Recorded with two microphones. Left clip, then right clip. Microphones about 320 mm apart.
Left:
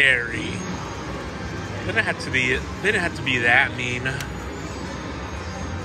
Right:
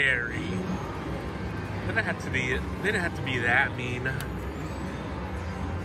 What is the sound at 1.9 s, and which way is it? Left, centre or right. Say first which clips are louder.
Speech: left 7 dB; centre.